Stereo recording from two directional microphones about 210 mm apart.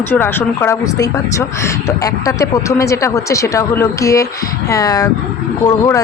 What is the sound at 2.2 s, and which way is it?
Speech, 15° left (ahead or behind).